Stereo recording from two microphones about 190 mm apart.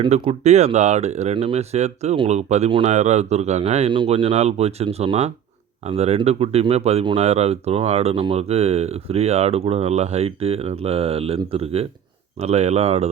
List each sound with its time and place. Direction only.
0.0 s speech: 35° right (ahead or behind)